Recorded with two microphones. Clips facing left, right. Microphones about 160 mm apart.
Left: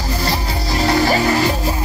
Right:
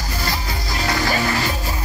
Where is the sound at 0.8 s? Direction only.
30° left (ahead or behind).